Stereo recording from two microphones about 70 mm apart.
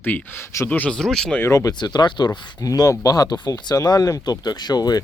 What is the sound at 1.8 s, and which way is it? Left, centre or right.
Speech, left.